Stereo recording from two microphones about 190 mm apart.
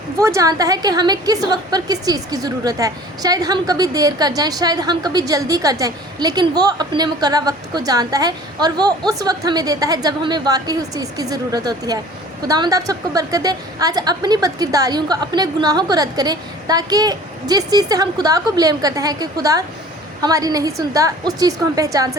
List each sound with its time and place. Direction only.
0.2 s a woman's voice: 15° right (ahead or behind)